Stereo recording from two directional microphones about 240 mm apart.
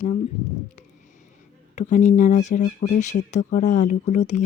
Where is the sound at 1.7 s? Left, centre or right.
Left.